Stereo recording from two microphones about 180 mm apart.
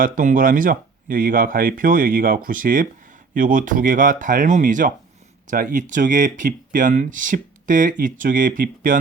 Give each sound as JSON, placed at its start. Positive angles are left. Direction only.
{"t": 0.0, "sound": "speech", "side_deg": -50}